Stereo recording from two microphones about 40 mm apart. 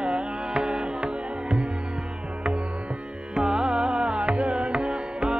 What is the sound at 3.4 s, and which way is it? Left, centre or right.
Music, centre.